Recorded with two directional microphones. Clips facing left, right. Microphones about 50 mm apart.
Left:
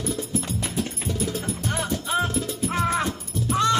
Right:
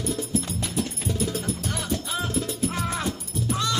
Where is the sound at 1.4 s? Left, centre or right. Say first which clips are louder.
Left 2 dB; left.